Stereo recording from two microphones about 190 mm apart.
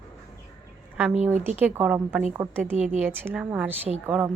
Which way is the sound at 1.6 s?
10° right (ahead or behind).